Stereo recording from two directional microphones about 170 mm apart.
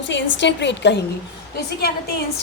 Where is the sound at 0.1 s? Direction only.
90° left.